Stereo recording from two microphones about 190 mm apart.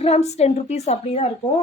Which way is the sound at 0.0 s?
35° left (ahead or behind).